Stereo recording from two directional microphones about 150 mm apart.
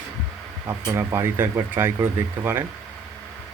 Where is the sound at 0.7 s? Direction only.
20° right (ahead or behind).